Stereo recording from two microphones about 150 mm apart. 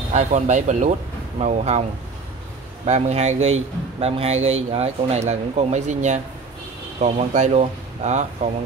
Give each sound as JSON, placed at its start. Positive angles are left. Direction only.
{"t": 0.1, "sound": "a man's voice", "side_deg": -50}
{"t": 2.9, "sound": "a man's voice", "side_deg": -50}